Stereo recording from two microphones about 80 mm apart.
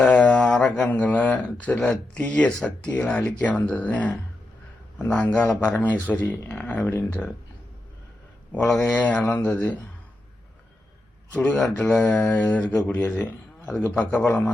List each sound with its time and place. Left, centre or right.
0.0 s speech: centre
8.6 s speech: centre
9.0 s speech: centre
11.8 s speech: centre